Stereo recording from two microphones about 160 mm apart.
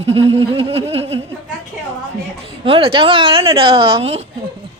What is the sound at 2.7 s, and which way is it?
A woman's voice, 35° right (ahead or behind).